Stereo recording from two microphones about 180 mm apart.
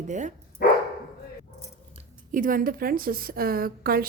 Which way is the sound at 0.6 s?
60° left (ahead or behind).